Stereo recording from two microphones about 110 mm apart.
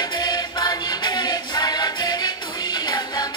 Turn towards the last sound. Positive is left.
turn(degrees=40)  # may be behind; listen again after turning